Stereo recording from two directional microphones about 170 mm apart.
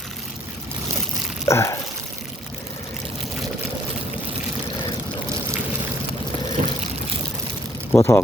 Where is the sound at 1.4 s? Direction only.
15° left (ahead or behind).